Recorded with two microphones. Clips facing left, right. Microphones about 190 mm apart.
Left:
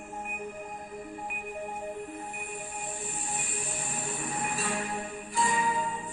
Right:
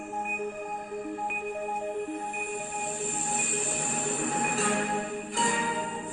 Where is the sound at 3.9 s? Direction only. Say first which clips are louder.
Right 5 dB; 65° right (ahead or behind).